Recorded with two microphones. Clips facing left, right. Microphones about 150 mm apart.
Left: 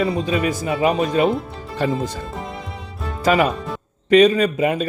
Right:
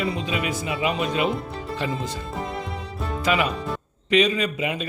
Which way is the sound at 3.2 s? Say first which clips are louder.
Left 6 dB; 45° left (ahead or behind).